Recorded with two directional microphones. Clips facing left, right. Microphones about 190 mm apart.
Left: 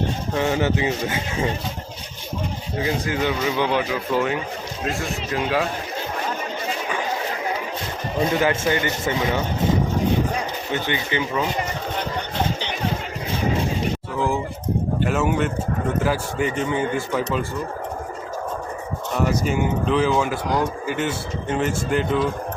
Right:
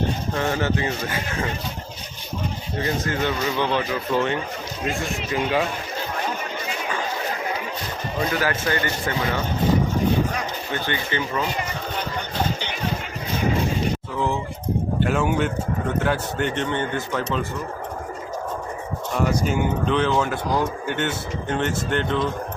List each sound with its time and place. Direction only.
0.3 s speech: 15° left (ahead or behind)
2.7 s speech: 10° left (ahead or behind)
8.3 s speech: 20° left (ahead or behind)
10.7 s speech: 15° left (ahead or behind)
15.0 s speech: centre (ahead or behind)
19.1 s speech: 5° left (ahead or behind)